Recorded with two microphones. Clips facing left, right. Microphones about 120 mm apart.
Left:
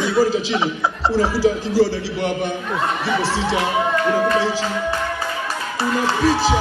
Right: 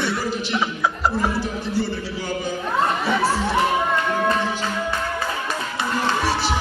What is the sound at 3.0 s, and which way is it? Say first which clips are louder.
Speech: even; 80° left.